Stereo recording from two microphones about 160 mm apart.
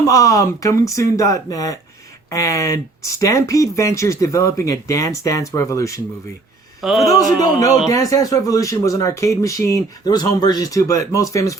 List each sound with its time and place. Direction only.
0.1 s speech: 20° left (ahead or behind)
6.8 s a man's voice: centre (ahead or behind)
7.3 s speech: 25° left (ahead or behind)